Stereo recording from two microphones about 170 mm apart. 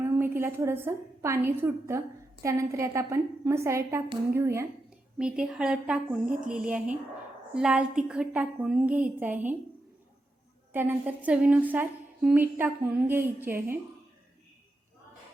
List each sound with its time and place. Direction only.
0.0 s a woman's voice: 15° right (ahead or behind)
5.1 s a woman's voice: 5° right (ahead or behind)
10.7 s a woman's voice: 10° right (ahead or behind)